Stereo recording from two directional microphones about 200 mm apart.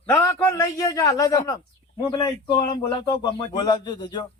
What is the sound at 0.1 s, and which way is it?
A man's voice, 10° left (ahead or behind).